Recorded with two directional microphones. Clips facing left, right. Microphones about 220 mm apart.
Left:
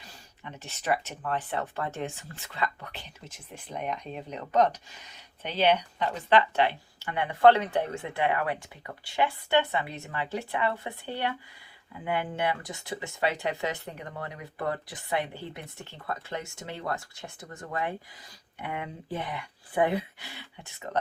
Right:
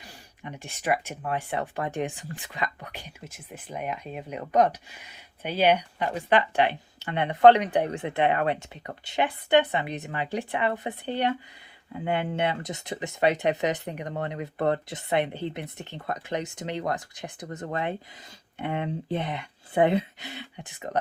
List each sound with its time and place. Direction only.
0.4 s speech: 15° right (ahead or behind)
19.1 s speech: 20° right (ahead or behind)